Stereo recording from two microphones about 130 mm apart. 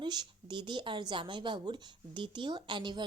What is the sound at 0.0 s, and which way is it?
A woman's voice, 35° right (ahead or behind).